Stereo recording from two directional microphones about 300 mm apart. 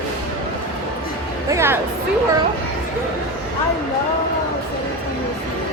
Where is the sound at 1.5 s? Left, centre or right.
Centre.